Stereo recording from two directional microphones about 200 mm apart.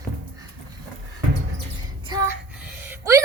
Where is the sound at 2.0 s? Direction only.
20° right (ahead or behind).